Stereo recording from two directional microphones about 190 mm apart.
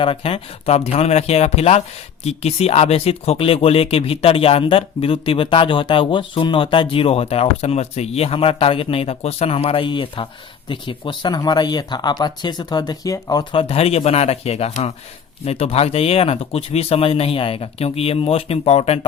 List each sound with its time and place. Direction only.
0.0 s speech: 30° left (ahead or behind)